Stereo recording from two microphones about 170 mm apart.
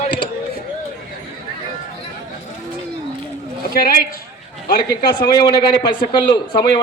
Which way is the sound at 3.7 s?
60° left (ahead or behind).